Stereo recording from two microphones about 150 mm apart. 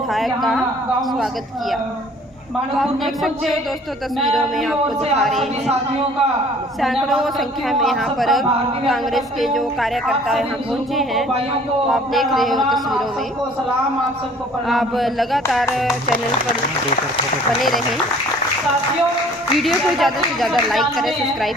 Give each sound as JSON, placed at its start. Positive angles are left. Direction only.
{"t": 0.1, "sound": "speech", "side_deg": 0}
{"t": 2.7, "sound": "speech", "side_deg": 0}
{"t": 6.8, "sound": "speech", "side_deg": 0}
{"t": 14.7, "sound": "speech", "side_deg": 0}
{"t": 17.6, "sound": "speech", "side_deg": 0}
{"t": 19.5, "sound": "speech", "side_deg": 0}